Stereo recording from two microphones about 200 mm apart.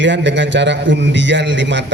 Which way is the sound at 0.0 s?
65° right (ahead or behind).